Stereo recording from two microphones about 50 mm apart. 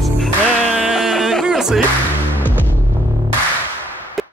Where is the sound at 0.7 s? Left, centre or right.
Centre.